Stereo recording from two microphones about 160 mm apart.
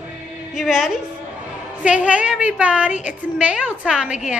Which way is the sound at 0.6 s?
5° right (ahead or behind).